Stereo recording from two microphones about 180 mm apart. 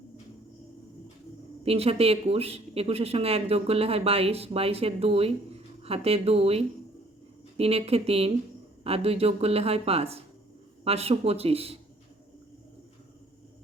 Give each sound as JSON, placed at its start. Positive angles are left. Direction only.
{"t": 1.6, "sound": "speech", "side_deg": -35}